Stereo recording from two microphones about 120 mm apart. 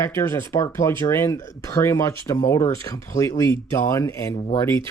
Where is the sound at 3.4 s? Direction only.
25° left (ahead or behind).